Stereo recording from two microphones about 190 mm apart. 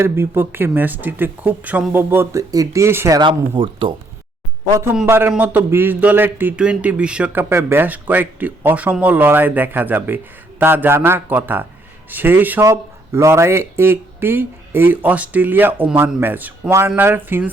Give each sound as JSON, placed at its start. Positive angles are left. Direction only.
{"t": 0.0, "sound": "speech", "side_deg": -10}
{"t": 3.2, "sound": "speech", "side_deg": -25}
{"t": 5.0, "sound": "speech", "side_deg": -10}